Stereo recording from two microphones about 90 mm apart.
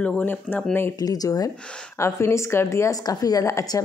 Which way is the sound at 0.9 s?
45° left (ahead or behind).